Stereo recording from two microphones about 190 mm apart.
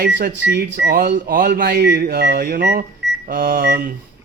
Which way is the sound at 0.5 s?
60° right (ahead or behind).